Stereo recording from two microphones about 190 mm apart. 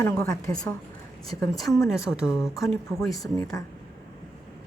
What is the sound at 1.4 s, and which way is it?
A woman's voice, 20° left (ahead or behind).